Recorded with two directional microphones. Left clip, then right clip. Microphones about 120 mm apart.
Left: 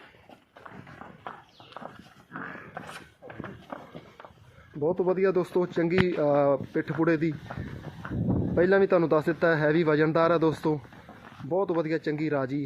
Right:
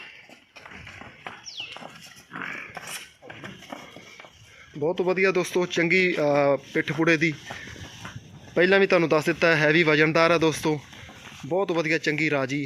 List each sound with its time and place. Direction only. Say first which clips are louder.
4.8 s a man's voice: right 2 dB; 30° right (ahead or behind)
8.5 s a man's voice: right 3 dB; 30° right (ahead or behind)